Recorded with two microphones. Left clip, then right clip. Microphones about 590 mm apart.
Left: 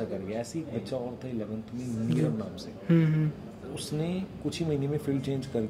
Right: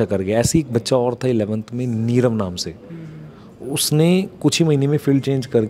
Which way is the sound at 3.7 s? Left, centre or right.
Right.